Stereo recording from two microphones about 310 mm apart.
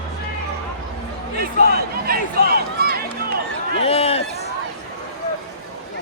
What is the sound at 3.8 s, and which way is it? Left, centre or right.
Run, centre.